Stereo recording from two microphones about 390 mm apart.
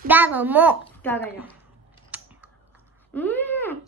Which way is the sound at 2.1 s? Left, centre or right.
Centre.